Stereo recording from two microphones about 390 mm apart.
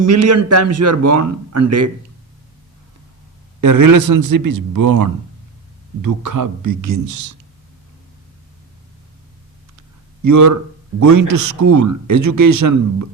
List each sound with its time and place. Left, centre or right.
0.0 s a man's voice: right
3.6 s speech: right
10.2 s speech: right